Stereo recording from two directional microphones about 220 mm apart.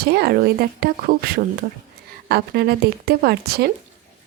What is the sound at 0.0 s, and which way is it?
A woman's voice, 45° right (ahead or behind).